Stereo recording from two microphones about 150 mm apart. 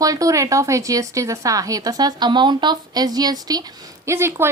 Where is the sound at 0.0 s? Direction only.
25° right (ahead or behind).